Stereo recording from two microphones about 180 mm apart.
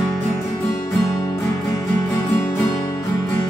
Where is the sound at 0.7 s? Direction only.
15° left (ahead or behind).